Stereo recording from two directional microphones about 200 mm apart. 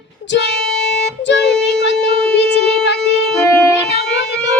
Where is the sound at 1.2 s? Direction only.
60° left (ahead or behind).